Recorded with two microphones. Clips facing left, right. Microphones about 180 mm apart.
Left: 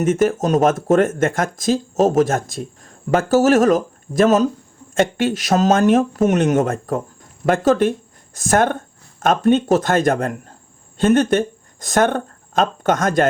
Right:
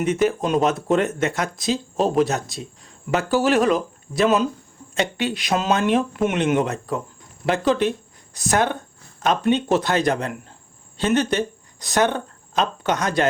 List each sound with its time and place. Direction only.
0.0 s speech: 45° left (ahead or behind)